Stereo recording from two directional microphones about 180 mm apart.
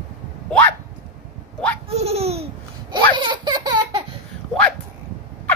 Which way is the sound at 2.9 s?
25° right (ahead or behind).